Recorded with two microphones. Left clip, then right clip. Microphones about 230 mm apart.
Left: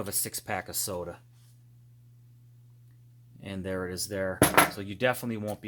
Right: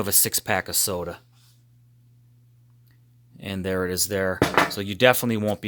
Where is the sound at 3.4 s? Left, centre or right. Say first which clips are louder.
Right 8 dB; right.